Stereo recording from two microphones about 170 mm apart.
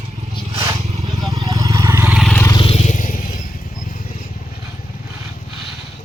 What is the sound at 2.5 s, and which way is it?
Vehicle, 30° left (ahead or behind).